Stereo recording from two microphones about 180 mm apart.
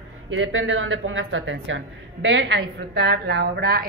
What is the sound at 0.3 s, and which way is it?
A woman's voice, 90° right.